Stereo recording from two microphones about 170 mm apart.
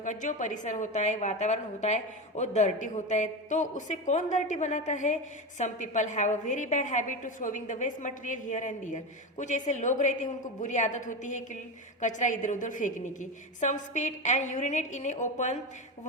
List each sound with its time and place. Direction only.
0.0 s a woman's voice: 50° left (ahead or behind)